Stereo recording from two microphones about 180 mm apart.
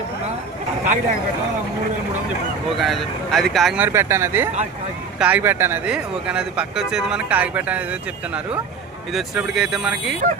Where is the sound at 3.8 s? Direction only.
15° right (ahead or behind).